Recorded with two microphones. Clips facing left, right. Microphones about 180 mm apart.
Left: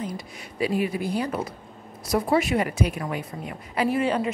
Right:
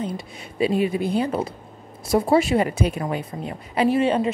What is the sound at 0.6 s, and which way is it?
A woman's voice, 25° right (ahead or behind).